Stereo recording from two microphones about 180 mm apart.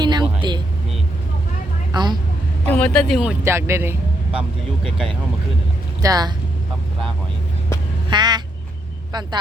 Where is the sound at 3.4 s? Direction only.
15° right (ahead or behind).